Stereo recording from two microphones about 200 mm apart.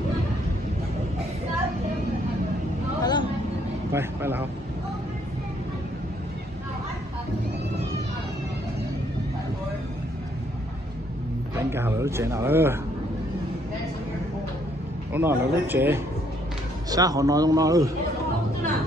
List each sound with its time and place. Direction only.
3.0 s vehicle: 20° left (ahead or behind)
3.9 s speech: 10° right (ahead or behind)
11.5 s a sound: 10° right (ahead or behind)
15.1 s a man's voice: 10° right (ahead or behind)